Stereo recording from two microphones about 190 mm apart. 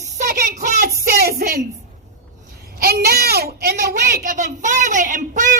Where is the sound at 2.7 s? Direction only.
55° right (ahead or behind).